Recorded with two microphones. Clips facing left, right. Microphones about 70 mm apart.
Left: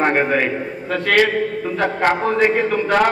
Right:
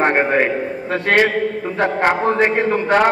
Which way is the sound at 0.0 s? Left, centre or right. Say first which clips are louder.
Right 1 dB; right.